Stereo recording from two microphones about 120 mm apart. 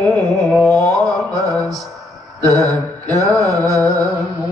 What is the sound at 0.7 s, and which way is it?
Music, 30° right (ahead or behind).